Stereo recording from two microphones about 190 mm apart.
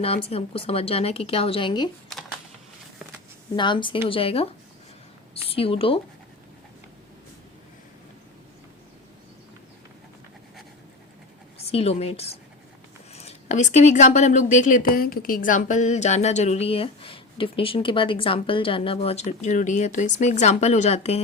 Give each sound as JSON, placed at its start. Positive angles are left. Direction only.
{"t": 0.0, "sound": "speech", "side_deg": 30}
{"t": 3.5, "sound": "a woman's voice", "side_deg": 25}
{"t": 11.7, "sound": "speech", "side_deg": 30}